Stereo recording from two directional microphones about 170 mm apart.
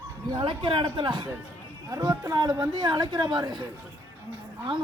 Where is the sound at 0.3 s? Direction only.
30° right (ahead or behind).